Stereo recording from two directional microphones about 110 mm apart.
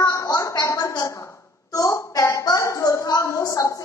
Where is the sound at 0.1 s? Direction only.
30° left (ahead or behind).